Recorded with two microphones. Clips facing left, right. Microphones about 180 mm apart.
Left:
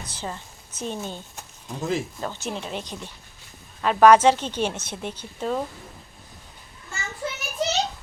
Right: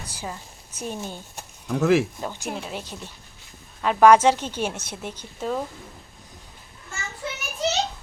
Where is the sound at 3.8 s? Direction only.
10° right (ahead or behind).